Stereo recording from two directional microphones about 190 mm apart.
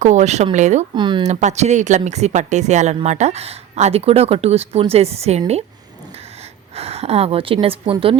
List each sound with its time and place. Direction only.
0.0 s speech: 40° right (ahead or behind)
0.9 s speech: 25° right (ahead or behind)
1.3 s a woman's voice: 35° right (ahead or behind)